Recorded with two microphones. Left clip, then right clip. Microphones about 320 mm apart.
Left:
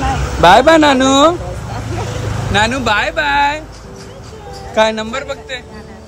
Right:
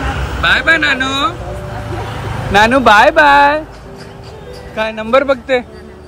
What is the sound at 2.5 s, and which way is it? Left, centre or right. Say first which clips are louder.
A man's voice: right 6 dB; centre.